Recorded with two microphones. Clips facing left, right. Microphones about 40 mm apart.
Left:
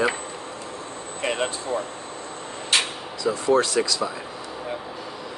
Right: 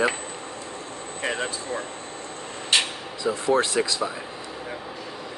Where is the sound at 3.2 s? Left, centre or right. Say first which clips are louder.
Left 2 dB; centre.